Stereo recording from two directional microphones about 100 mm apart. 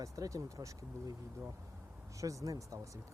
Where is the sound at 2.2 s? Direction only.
35° right (ahead or behind).